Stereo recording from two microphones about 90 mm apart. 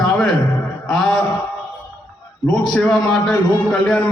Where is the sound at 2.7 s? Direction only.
5° left (ahead or behind).